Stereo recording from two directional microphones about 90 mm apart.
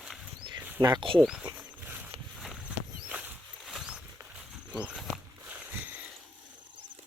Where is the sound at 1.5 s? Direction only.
20° right (ahead or behind).